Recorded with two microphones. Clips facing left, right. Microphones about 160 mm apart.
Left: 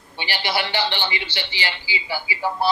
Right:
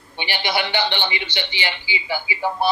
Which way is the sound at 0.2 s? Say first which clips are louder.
Right 1 dB; 20° right (ahead or behind).